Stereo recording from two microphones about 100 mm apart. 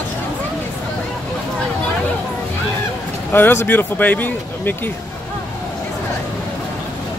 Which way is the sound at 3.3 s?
20° left (ahead or behind).